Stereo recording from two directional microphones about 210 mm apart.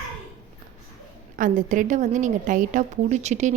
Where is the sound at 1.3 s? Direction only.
40° right (ahead or behind).